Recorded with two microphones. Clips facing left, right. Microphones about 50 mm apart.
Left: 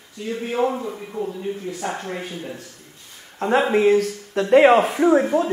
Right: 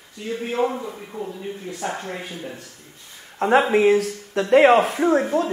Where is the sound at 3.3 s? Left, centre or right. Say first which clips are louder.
Right 2 dB; centre.